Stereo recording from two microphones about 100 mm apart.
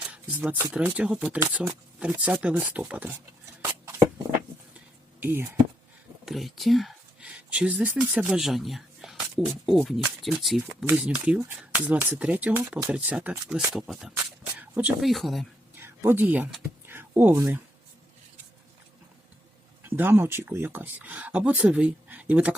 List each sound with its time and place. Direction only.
0.1 s speech: 15° right (ahead or behind)
3.6 s a sound: 25° right (ahead or behind)
5.2 s speech: 20° right (ahead or behind)
6.2 s speech: centre (ahead or behind)
7.5 s speech: 10° right (ahead or behind)
8.4 s speech: centre (ahead or behind)
10.8 s speech: 15° right (ahead or behind)
13.7 s speech: centre (ahead or behind)
14.5 s a sound: 15° right (ahead or behind)
15.0 s speech: centre (ahead or behind)
15.8 s speech: 25° right (ahead or behind)
16.8 s a sound: 20° right (ahead or behind)
20.0 s speech: 20° right (ahead or behind)